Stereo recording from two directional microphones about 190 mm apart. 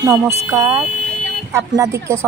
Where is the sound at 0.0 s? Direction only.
15° right (ahead or behind).